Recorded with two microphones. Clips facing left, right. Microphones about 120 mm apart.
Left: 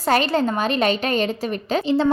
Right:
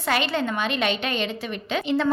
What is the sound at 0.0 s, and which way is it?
A woman's voice, 40° left (ahead or behind).